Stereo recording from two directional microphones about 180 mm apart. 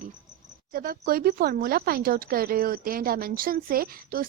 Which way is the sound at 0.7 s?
55° right (ahead or behind).